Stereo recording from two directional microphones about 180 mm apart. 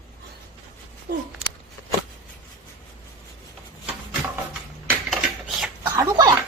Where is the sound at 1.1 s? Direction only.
60° right (ahead or behind).